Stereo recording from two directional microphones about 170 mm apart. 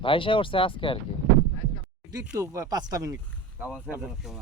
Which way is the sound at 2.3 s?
20° right (ahead or behind).